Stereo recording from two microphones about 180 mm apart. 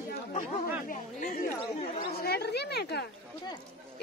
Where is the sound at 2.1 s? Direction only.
60° left (ahead or behind).